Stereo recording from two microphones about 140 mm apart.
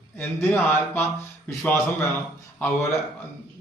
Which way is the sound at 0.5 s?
15° left (ahead or behind).